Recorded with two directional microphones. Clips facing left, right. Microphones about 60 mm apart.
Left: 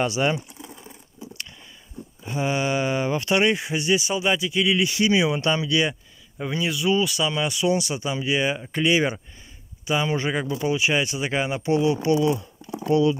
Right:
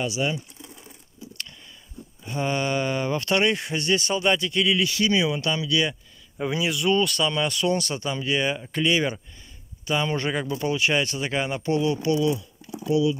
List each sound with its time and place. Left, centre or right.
0.0 s speech: left
2.2 s speech: centre
4.7 s speech: left
6.3 s speech: centre; by 13.1 s left